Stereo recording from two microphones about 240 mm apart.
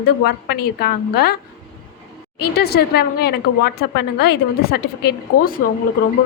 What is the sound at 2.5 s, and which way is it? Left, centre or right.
A woman's voice, left.